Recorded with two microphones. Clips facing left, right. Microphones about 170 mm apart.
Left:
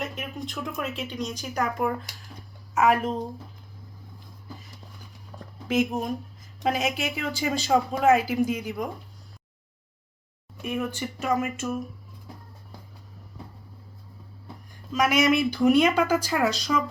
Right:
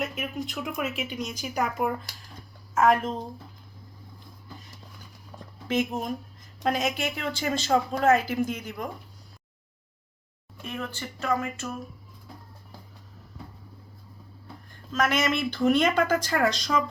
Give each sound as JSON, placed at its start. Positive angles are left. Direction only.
{"t": 0.0, "sound": "speech", "side_deg": -5}
{"t": 5.6, "sound": "speech", "side_deg": 10}
{"t": 10.6, "sound": "speech", "side_deg": 15}
{"t": 14.7, "sound": "speech", "side_deg": 10}